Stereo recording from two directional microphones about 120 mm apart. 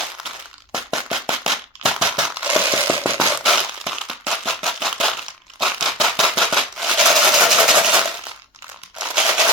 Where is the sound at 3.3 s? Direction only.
Centre (ahead or behind).